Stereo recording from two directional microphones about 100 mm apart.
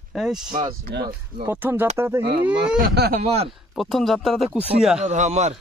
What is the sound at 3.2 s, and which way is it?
Speech, 90° right.